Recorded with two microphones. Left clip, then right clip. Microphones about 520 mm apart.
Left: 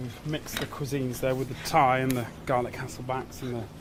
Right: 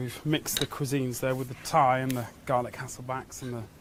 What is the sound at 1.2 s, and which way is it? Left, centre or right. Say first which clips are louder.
Speech: left 2 dB; right.